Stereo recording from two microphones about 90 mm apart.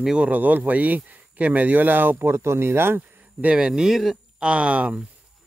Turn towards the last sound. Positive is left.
turn(degrees=-15)  # may be behind; listen again after turning